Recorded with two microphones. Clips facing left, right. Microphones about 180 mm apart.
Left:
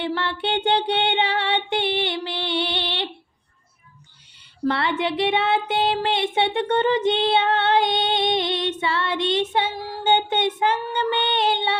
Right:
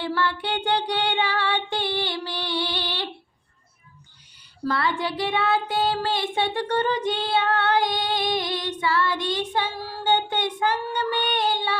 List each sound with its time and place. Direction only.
0.0 s child singing: 25° left (ahead or behind)
4.6 s speech: 25° left (ahead or behind)